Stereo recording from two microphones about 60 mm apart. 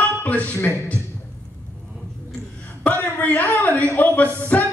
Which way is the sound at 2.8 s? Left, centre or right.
Left.